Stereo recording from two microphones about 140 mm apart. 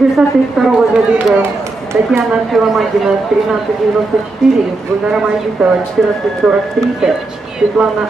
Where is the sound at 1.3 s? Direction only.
20° right (ahead or behind).